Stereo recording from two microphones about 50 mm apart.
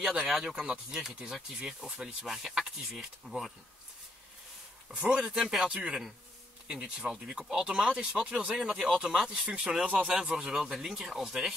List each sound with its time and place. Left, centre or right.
0.0 s speech: centre
5.0 s speech: centre
8.7 s speech: centre